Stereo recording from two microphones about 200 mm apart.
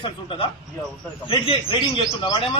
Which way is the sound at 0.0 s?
25° left (ahead or behind).